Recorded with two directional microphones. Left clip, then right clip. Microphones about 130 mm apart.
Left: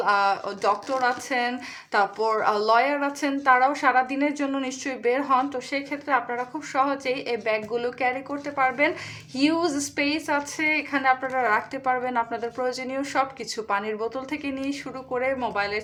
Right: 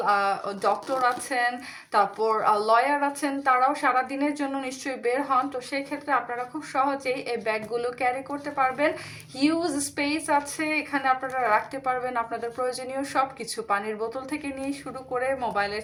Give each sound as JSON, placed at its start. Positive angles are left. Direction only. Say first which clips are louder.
{"t": 0.0, "sound": "speech", "louder": "left 2 dB", "side_deg": 40}